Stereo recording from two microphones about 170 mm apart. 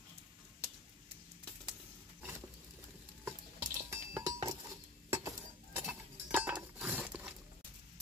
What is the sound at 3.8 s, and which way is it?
Chink, 15° right (ahead or behind).